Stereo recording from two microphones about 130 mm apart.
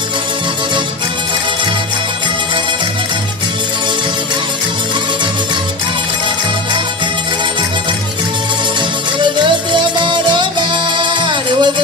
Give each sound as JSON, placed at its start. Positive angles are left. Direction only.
{"t": 9.2, "sound": "music", "side_deg": -35}